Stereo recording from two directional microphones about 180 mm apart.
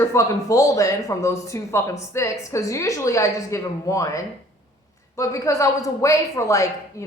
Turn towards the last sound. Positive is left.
turn(degrees=15)  # may be behind; listen again after turning